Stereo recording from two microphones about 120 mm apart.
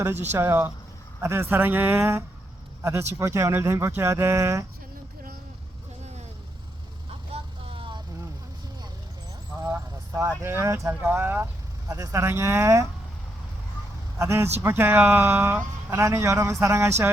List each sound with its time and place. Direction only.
0.0 s speech: 20° right (ahead or behind)
7.3 s vehicle: 50° right (ahead or behind)
9.6 s a sound: 20° right (ahead or behind)
10.2 s speech: 20° right (ahead or behind)
14.2 s speech: 20° right (ahead or behind)